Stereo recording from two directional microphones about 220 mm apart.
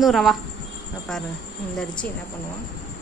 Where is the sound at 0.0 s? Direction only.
Centre (ahead or behind).